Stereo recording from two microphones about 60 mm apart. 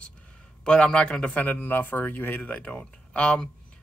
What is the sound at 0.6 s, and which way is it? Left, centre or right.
A man's voice, centre.